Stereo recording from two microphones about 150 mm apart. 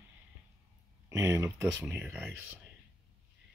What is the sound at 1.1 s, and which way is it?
Speech, 20° right (ahead or behind).